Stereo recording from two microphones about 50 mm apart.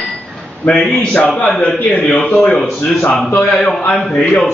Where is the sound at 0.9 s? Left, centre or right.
Left.